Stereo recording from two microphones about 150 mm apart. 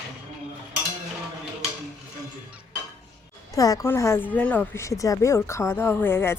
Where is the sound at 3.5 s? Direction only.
25° left (ahead or behind).